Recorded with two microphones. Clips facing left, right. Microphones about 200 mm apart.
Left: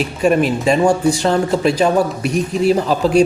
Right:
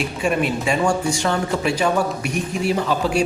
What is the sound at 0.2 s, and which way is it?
Speech, 40° left (ahead or behind).